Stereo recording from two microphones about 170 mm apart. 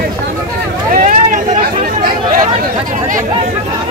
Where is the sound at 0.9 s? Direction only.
50° right (ahead or behind).